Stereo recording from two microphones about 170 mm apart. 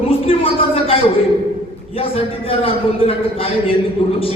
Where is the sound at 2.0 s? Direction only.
35° left (ahead or behind).